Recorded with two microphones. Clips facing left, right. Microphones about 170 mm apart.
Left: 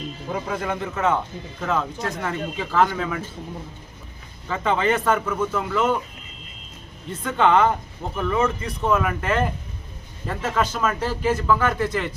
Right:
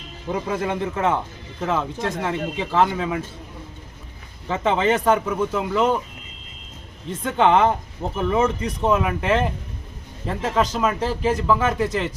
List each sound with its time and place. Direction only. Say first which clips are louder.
0.3 s a man's voice: right 3 dB; 25° right (ahead or behind)
4.4 s a man's voice: right 2 dB; 25° right (ahead or behind)
7.3 s a man's voice: right 1 dB; 25° right (ahead or behind)